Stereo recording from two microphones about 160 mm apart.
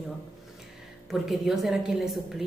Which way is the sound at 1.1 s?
Centre (ahead or behind).